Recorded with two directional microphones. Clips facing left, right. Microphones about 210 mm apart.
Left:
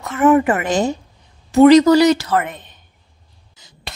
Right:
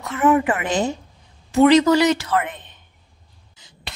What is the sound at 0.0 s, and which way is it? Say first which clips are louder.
A woman's voice: left 4 dB; 45° left (ahead or behind).